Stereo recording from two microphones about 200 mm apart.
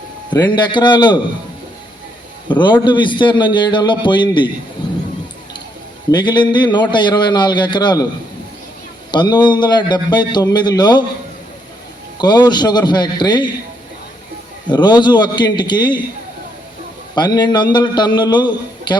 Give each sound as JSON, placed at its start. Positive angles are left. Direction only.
{"t": 0.3, "sound": "a man's voice", "side_deg": 20}
{"t": 2.5, "sound": "a man's voice", "side_deg": 25}
{"t": 4.8, "sound": "a sound", "side_deg": 25}
{"t": 6.1, "sound": "a man's voice", "side_deg": 20}
{"t": 9.1, "sound": "a man's voice", "side_deg": 20}
{"t": 12.1, "sound": "a man's voice", "side_deg": 20}
{"t": 14.7, "sound": "a man's voice", "side_deg": 20}
{"t": 17.2, "sound": "a man's voice", "side_deg": 20}